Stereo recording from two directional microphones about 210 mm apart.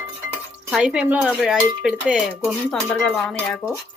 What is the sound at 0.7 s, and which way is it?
Speech, 5° right (ahead or behind).